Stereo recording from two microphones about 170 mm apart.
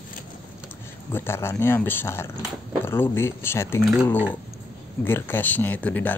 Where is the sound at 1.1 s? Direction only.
15° left (ahead or behind).